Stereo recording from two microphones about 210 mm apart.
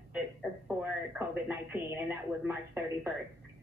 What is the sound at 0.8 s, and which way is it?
Speech, 10° right (ahead or behind).